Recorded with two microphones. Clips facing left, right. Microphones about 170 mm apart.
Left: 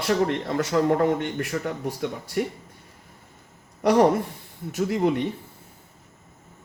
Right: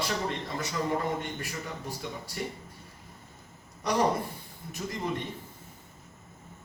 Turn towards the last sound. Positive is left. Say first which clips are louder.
# left 11 dB
turn(degrees=70)  # may be behind; listen again after turning